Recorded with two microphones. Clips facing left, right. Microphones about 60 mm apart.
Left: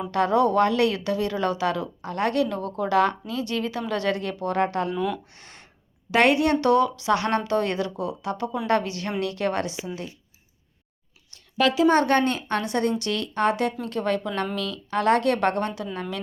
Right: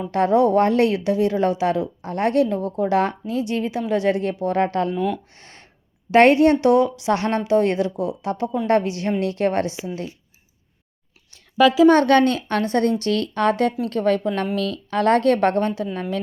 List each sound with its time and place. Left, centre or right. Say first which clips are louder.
0.1 s a woman's voice: right 4 dB; right
4.6 s a woman's voice: right 3 dB; right
4.9 s speech: right 3 dB; centre
5.4 s a sound: right 1 dB; right
6.1 s a woman's voice: right 6 dB; right
11.9 s a woman's voice: right 5 dB; right